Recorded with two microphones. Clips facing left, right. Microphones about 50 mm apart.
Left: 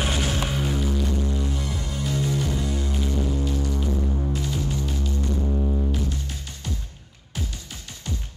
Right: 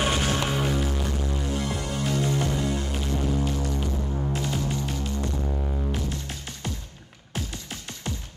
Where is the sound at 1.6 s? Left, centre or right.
Right.